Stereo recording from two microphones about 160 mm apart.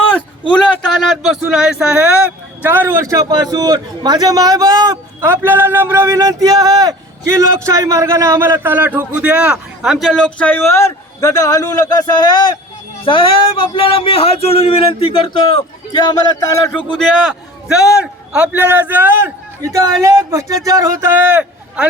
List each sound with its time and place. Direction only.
0.7 s speech: centre (ahead or behind)
2.6 s a man's voice: 15° right (ahead or behind); by 16.8 s 15° left (ahead or behind)
18.3 s a man's voice: 10° right (ahead or behind)